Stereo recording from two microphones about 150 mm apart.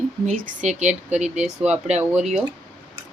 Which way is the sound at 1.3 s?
5° right (ahead or behind).